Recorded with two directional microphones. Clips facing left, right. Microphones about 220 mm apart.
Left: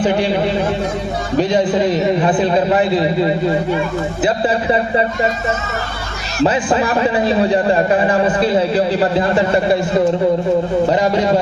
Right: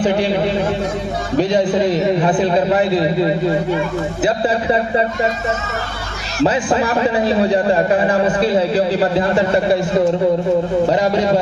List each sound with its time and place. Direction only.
0.0 s a man's voice: 35° right (ahead or behind)
6.4 s a man's voice: 35° right (ahead or behind)
10.8 s a man's voice: 35° right (ahead or behind)